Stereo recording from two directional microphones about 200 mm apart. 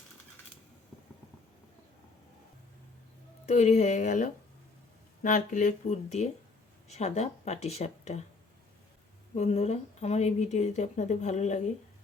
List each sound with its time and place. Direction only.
3.4 s speech: 35° left (ahead or behind)
9.3 s speech: 30° left (ahead or behind)